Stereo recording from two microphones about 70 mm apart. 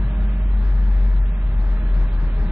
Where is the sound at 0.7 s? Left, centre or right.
Centre.